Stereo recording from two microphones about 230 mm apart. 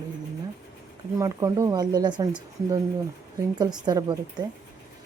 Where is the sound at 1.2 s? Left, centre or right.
Centre.